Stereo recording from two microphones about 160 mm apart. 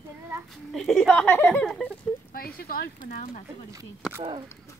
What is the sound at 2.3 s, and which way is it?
Speech, 65° left (ahead or behind).